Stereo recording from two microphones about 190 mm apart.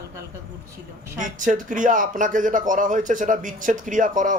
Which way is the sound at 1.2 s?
45° right (ahead or behind).